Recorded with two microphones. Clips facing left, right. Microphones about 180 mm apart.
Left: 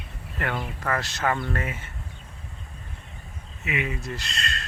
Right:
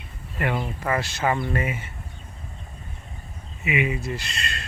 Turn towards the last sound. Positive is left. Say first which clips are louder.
# right 1 dB
turn(degrees=-5)  # may be behind; listen again after turning